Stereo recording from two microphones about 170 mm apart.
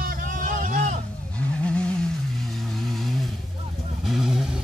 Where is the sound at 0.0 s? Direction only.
50° right (ahead or behind).